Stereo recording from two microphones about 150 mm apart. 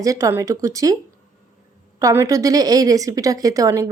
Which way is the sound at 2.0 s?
20° right (ahead or behind).